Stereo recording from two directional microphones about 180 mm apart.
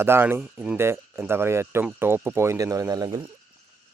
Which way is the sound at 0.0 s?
10° right (ahead or behind).